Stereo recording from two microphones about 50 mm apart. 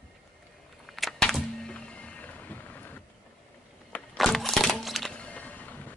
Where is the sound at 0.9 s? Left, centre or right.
Centre.